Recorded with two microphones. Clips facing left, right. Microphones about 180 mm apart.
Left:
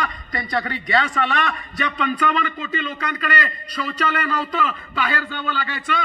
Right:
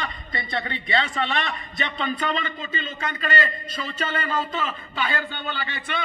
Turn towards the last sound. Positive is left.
turn(degrees=-25)  # may be behind; listen again after turning